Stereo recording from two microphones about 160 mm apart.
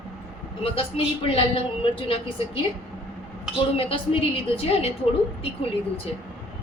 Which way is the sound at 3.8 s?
35° left (ahead or behind).